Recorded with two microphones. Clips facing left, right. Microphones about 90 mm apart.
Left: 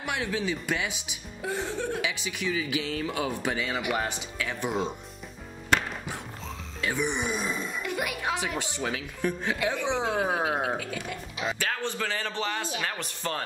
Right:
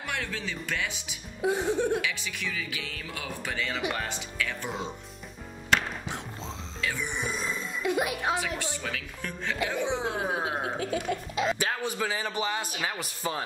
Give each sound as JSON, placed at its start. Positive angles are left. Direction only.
{"t": 0.0, "sound": "speech", "side_deg": 15}
{"t": 1.4, "sound": "a man's voice", "side_deg": -15}
{"t": 2.0, "sound": "speech", "side_deg": 20}
{"t": 6.8, "sound": "speech", "side_deg": 20}
{"t": 7.8, "sound": "speech", "side_deg": -20}
{"t": 8.4, "sound": "speech", "side_deg": 20}
{"t": 10.3, "sound": "music", "side_deg": 30}
{"t": 10.8, "sound": "speech", "side_deg": -30}
{"t": 11.5, "sound": "a man's voice", "side_deg": -15}